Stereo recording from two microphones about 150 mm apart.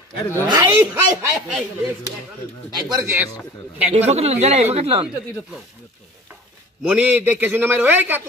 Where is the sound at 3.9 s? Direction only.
45° right (ahead or behind).